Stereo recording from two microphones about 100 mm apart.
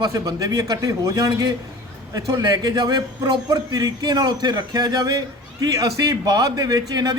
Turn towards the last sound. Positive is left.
turn(degrees=-40)  # may be behind; listen again after turning